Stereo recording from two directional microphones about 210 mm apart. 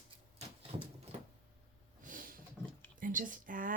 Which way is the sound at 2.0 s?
40° right (ahead or behind).